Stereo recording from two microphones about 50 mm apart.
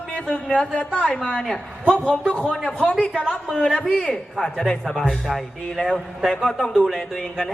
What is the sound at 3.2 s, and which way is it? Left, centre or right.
A man's voice, centre.